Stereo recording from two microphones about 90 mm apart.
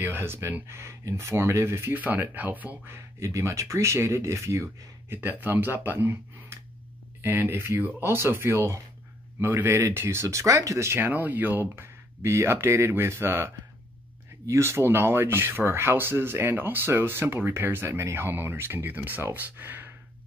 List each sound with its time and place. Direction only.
0.0 s speech: 25° right (ahead or behind)
5.1 s speech: 20° right (ahead or behind)